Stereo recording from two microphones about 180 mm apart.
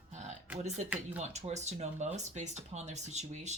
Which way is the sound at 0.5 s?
40° right (ahead or behind).